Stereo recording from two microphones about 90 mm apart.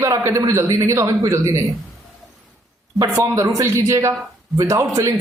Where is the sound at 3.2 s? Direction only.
40° right (ahead or behind).